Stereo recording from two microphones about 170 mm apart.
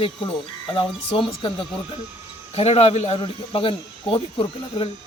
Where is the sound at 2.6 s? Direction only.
35° left (ahead or behind).